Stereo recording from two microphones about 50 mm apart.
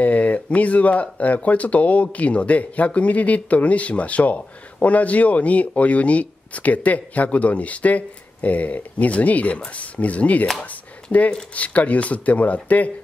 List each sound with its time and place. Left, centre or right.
0.0 s speech: left
10.6 s a sound: left
11.5 s speech: left